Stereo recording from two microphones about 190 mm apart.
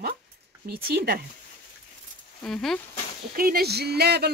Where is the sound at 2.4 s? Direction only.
Centre (ahead or behind).